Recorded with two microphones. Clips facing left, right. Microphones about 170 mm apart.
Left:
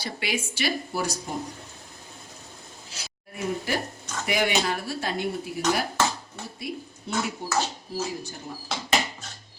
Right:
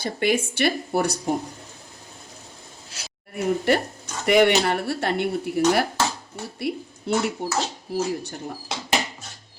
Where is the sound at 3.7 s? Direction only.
65° right (ahead or behind).